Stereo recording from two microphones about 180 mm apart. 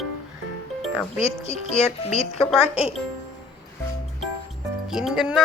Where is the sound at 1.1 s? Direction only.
35° left (ahead or behind).